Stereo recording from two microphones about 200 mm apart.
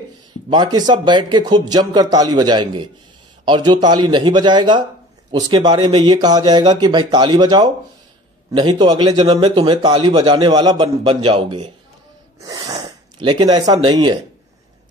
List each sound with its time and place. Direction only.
0.5 s a man's voice: 20° right (ahead or behind)